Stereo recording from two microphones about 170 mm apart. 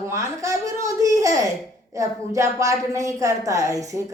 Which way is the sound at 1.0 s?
20° right (ahead or behind).